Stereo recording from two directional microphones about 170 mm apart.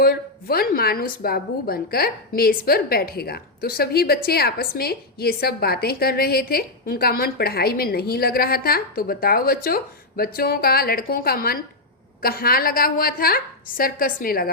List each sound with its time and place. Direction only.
0.0 s a woman's voice: 60° left (ahead or behind)